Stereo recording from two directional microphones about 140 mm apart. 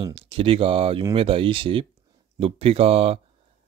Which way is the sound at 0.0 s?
40° right (ahead or behind).